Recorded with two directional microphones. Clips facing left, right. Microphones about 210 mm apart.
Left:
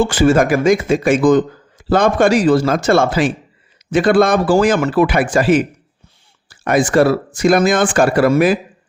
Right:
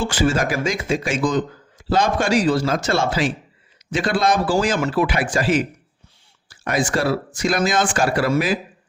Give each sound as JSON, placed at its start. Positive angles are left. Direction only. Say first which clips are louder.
{"t": 0.0, "sound": "speech", "louder": "left 7 dB", "side_deg": 55}